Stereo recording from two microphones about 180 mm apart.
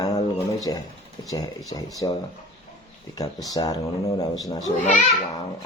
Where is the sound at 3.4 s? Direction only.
20° left (ahead or behind).